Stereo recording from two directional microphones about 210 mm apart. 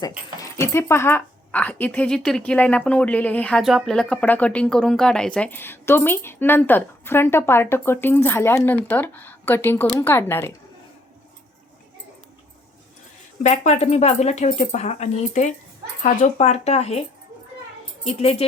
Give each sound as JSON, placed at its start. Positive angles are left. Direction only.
{"t": 0.5, "sound": "speech", "side_deg": 10}
{"t": 13.4, "sound": "speech", "side_deg": 30}
{"t": 18.0, "sound": "speech", "side_deg": 30}